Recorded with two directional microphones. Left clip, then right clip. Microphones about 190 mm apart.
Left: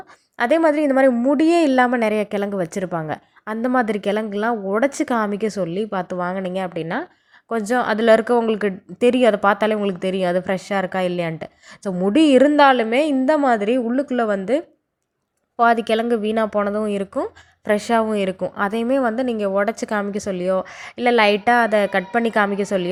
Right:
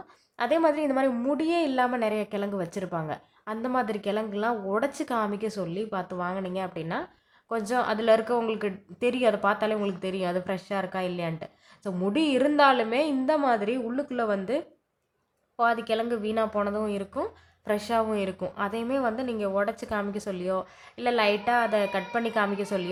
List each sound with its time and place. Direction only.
0.3 s a woman's voice: 30° left (ahead or behind)